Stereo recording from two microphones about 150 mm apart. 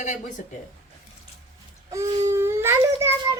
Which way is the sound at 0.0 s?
50° left (ahead or behind).